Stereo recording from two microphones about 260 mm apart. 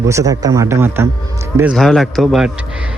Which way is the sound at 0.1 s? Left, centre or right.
Centre.